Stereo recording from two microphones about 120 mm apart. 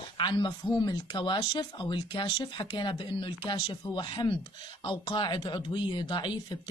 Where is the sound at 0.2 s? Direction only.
40° left (ahead or behind).